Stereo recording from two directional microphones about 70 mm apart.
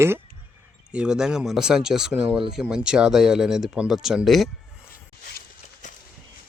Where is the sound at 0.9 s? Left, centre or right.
Centre.